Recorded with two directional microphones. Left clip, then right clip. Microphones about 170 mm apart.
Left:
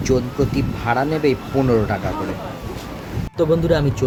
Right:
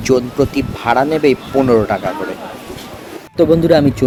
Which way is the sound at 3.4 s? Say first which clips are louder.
Right 7 dB; 25° right (ahead or behind).